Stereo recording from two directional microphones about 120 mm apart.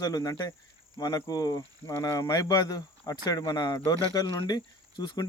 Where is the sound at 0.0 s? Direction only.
30° left (ahead or behind).